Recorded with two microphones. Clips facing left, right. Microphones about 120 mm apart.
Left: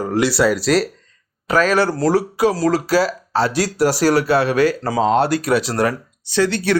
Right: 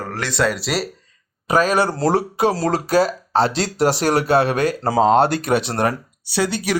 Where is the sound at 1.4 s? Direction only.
15° right (ahead or behind).